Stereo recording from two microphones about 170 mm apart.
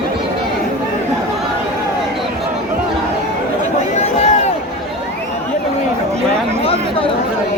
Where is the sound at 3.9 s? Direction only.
40° left (ahead or behind).